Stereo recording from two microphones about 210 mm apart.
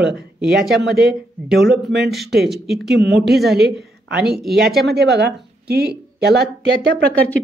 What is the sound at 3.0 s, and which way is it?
Speech, 55° right (ahead or behind).